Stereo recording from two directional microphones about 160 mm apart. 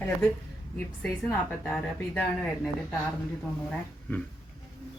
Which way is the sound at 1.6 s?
10° left (ahead or behind).